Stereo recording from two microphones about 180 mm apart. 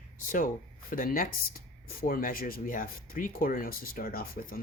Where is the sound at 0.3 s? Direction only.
50° left (ahead or behind).